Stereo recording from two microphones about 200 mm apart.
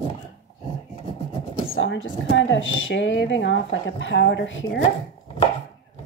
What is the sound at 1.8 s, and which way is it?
A woman's voice, 70° left (ahead or behind).